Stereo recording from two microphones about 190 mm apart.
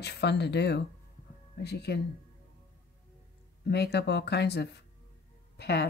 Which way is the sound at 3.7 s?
60° left (ahead or behind).